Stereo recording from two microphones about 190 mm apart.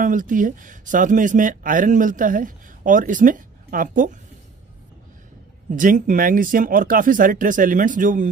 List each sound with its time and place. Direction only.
0.0 s speech: 45° right (ahead or behind)
5.7 s speech: 45° right (ahead or behind)